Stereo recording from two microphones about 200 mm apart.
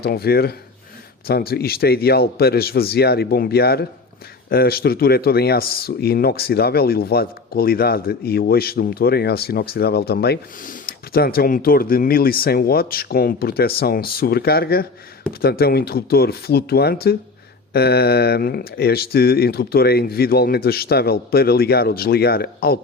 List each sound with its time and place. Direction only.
0.0 s speech: 50° left (ahead or behind)